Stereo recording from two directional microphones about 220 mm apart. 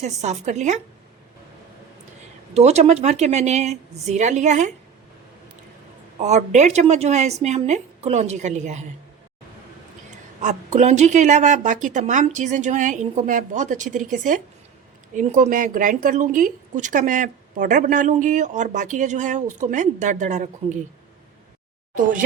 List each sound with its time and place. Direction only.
0.0 s a woman's voice: 30° right (ahead or behind)
2.6 s a woman's voice: 30° right (ahead or behind)
6.1 s a woman's voice: 30° right (ahead or behind)
10.4 s a woman's voice: 30° right (ahead or behind)